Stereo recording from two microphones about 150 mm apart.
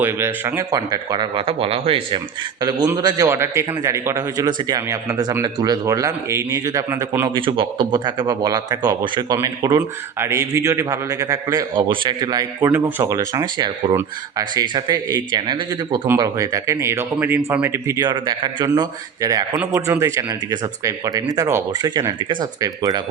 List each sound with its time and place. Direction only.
0.0 s speech: 15° right (ahead or behind)
7.3 s speech: 35° right (ahead or behind)